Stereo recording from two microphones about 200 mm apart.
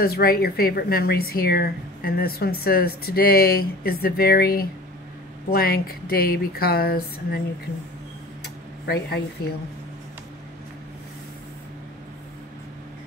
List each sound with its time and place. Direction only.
0.0 s speech: 50° left (ahead or behind)
8.8 s speech: 55° left (ahead or behind)